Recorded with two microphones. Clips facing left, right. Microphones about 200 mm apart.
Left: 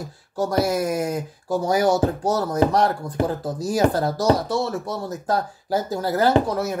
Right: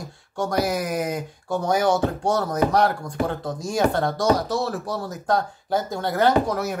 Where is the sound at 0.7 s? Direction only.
Centre (ahead or behind).